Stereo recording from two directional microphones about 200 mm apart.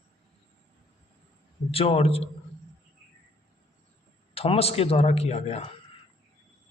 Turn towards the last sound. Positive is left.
turn(degrees=30)  # may be behind; listen again after turning